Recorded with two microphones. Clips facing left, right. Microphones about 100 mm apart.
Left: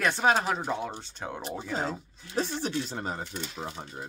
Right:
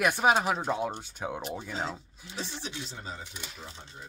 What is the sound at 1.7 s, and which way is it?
Speech, 45° left (ahead or behind).